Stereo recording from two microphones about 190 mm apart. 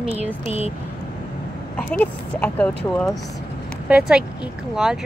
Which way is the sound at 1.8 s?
5° left (ahead or behind).